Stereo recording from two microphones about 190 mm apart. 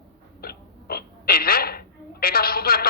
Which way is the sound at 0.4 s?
55° left (ahead or behind).